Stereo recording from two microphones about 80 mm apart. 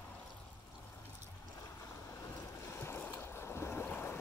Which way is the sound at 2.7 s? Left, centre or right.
Left.